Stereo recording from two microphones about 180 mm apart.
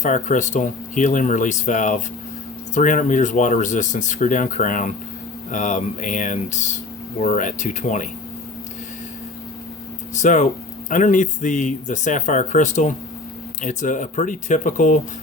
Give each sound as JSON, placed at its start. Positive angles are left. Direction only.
{"t": 0.0, "sound": "speech", "side_deg": 45}
{"t": 10.2, "sound": "speech", "side_deg": 45}